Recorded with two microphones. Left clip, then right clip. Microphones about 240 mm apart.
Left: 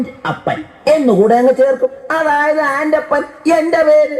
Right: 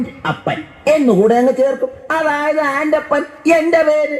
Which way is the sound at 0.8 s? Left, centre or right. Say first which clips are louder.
Left 1 dB; right.